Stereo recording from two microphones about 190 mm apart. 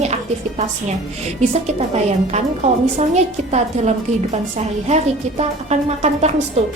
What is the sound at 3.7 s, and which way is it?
A woman's voice, 35° right (ahead or behind).